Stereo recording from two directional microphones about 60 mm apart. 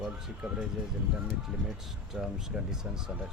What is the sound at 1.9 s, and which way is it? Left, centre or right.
Speech, centre.